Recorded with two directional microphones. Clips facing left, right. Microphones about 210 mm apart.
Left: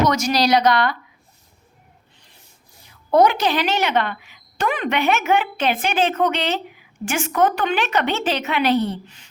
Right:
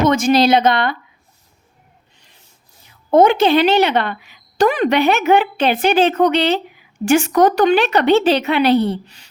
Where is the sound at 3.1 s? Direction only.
25° right (ahead or behind).